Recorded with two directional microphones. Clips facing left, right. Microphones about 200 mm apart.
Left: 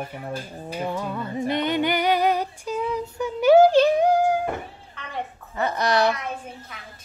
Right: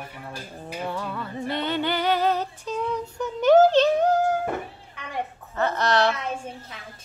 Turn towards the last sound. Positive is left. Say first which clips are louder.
# left 1 dB
turn(degrees=10)  # may be behind; listen again after turning